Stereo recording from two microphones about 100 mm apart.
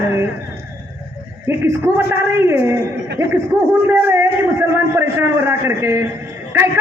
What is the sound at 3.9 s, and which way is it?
A man's voice, 25° right (ahead or behind).